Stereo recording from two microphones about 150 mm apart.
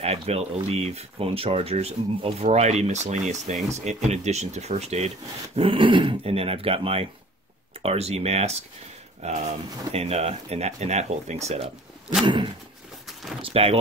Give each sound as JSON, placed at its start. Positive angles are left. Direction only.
{"t": 0.0, "sound": "speech", "side_deg": -45}
{"t": 5.6, "sound": "speech", "side_deg": -35}
{"t": 13.4, "sound": "speech", "side_deg": -40}